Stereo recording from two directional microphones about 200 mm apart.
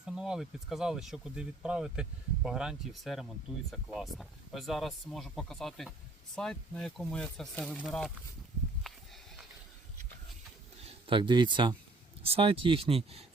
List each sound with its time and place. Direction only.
0.0 s speech: 5° right (ahead or behind)
8.9 s a sound: centre (ahead or behind)
10.8 s speech: 25° right (ahead or behind)